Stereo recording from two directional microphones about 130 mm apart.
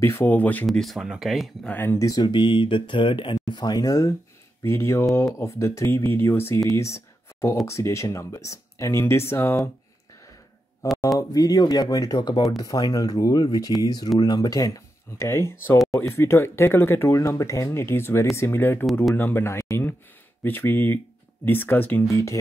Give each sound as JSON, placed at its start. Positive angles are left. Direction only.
{"t": 0.0, "sound": "speech", "side_deg": 20}
{"t": 0.7, "sound": "speech", "side_deg": 0}
{"t": 1.7, "sound": "speech", "side_deg": 15}
{"t": 2.0, "sound": "speech", "side_deg": 35}
{"t": 10.8, "sound": "a sound", "side_deg": 25}
{"t": 11.1, "sound": "speech", "side_deg": 30}